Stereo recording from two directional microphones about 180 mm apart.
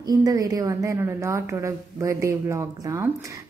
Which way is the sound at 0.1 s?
20° right (ahead or behind).